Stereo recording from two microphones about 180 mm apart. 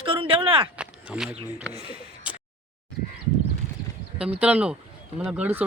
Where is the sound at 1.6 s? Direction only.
5° right (ahead or behind).